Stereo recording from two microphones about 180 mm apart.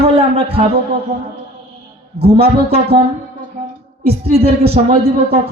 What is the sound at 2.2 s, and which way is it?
Speech, 35° right (ahead or behind).